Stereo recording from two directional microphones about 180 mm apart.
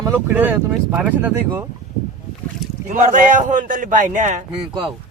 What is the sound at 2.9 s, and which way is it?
A man's voice, 45° right (ahead or behind).